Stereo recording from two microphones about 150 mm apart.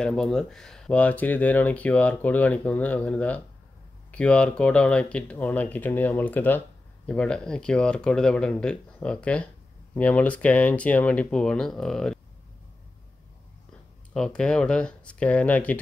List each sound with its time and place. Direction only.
0.0 s speech: 5° left (ahead or behind)
14.1 s speech: 5° left (ahead or behind)